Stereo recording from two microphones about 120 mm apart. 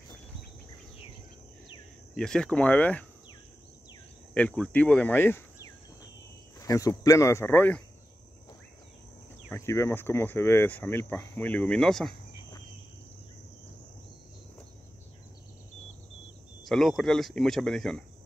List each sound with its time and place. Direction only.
2.1 s speech: 5° left (ahead or behind)
4.3 s speech: 10° left (ahead or behind)
6.6 s speech: 25° left (ahead or behind)
9.5 s speech: 25° left (ahead or behind); by 12.1 s 5° left (ahead or behind)
16.6 s speech: centre (ahead or behind)